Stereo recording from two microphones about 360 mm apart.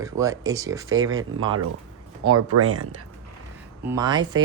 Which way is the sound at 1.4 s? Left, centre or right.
Right.